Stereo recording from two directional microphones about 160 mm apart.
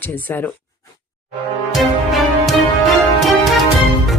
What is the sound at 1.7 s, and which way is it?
Music, centre (ahead or behind).